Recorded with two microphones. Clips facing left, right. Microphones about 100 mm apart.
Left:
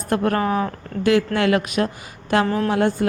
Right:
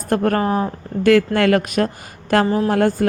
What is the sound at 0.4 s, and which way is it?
Speech, 30° right (ahead or behind).